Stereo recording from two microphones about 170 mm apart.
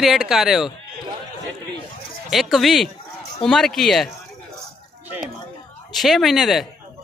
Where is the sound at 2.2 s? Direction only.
Centre (ahead or behind).